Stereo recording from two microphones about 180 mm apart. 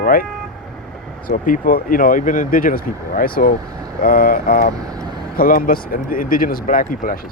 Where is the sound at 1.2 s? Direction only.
50° left (ahead or behind).